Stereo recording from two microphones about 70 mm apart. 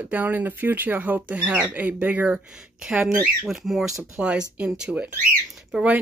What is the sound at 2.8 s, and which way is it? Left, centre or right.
Speech, centre.